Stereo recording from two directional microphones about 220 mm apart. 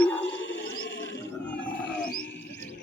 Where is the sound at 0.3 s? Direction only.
55° left (ahead or behind).